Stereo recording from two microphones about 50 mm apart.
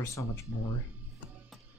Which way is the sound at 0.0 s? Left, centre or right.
Left.